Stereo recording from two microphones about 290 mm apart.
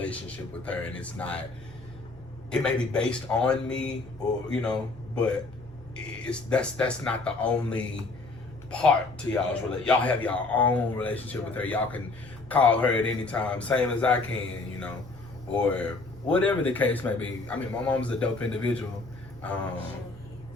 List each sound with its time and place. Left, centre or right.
0.0 s a man's voice: centre
2.5 s a man's voice: centre
15.5 s a man's voice: centre